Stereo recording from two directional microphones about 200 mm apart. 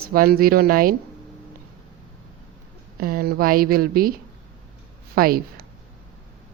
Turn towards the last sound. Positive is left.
turn(degrees=-50)  # may be behind; listen again after turning